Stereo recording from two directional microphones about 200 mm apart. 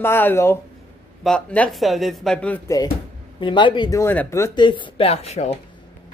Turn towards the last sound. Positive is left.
turn(degrees=35)  # may be behind; listen again after turning